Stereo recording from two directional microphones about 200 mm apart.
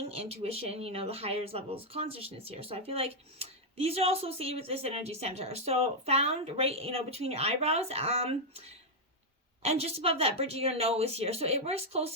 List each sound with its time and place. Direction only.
0.0 s speech: 30° right (ahead or behind)